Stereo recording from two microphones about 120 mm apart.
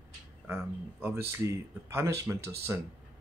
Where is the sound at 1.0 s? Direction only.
20° right (ahead or behind).